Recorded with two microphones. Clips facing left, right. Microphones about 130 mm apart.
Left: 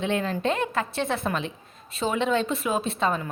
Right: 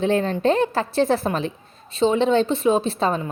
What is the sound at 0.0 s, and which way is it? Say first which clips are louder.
A woman's voice: right 6 dB; 35° right (ahead or behind).